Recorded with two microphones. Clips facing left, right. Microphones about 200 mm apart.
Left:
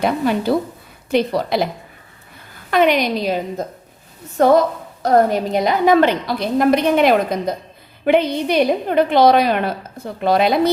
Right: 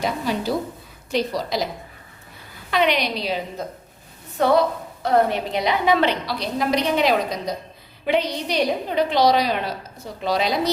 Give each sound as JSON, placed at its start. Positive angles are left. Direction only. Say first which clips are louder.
{"t": 0.0, "sound": "a woman's voice", "louder": "left 6 dB", "side_deg": 60}
{"t": 2.6, "sound": "a woman's voice", "louder": "left 5 dB", "side_deg": 50}